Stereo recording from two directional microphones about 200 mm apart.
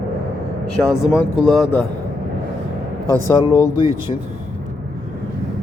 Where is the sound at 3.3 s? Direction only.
15° left (ahead or behind).